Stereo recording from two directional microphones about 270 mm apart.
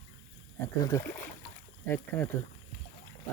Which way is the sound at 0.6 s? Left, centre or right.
Centre.